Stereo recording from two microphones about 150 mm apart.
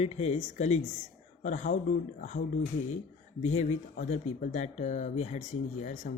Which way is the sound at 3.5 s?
55° left (ahead or behind).